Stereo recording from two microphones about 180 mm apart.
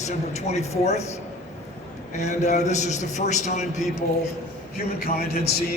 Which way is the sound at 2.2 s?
40° left (ahead or behind).